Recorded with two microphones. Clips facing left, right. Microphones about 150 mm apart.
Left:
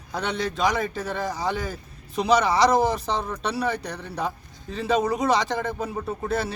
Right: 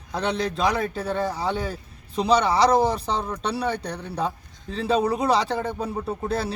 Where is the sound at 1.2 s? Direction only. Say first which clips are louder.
Right 1 dB; 30° right (ahead or behind).